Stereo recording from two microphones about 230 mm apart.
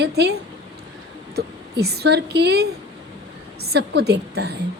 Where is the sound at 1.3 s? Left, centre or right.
Right.